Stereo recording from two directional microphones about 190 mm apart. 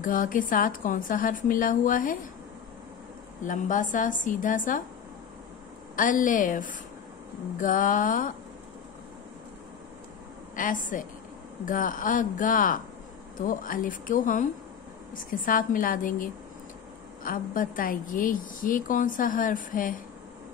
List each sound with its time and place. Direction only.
0.0 s speech: 45° left (ahead or behind)
3.4 s speech: 40° left (ahead or behind)
5.9 s speech: 45° left (ahead or behind)
10.5 s speech: 45° left (ahead or behind)